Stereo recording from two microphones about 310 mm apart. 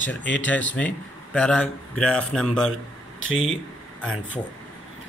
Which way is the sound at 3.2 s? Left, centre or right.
Left.